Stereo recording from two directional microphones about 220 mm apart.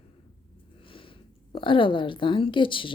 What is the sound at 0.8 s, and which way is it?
Speech, 25° left (ahead or behind).